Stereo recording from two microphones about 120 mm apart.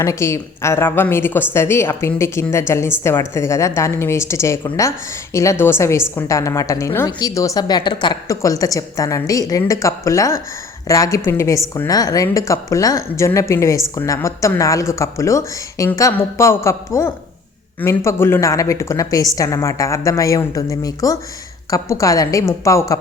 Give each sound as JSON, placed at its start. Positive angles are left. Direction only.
{"t": 0.0, "sound": "a woman's voice", "side_deg": 25}
{"t": 8.3, "sound": "a woman's voice", "side_deg": 25}